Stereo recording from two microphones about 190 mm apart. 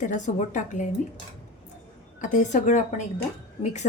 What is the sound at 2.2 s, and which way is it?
Speech, 40° left (ahead or behind).